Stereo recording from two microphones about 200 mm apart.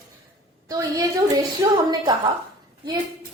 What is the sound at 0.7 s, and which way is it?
A woman's voice, 15° right (ahead or behind).